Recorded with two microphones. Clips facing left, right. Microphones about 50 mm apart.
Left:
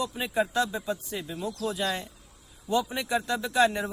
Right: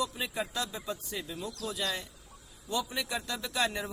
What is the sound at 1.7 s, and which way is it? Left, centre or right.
Speech, left.